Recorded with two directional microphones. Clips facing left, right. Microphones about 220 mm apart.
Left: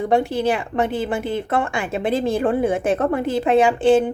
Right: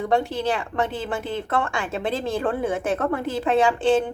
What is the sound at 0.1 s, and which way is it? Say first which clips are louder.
A woman's voice: left 4 dB; 10° left (ahead or behind).